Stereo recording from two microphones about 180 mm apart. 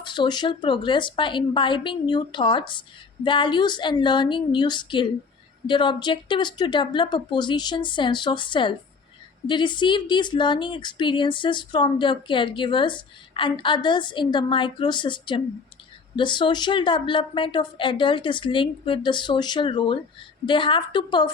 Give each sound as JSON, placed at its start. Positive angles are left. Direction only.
{"t": 0.0, "sound": "speech", "side_deg": 25}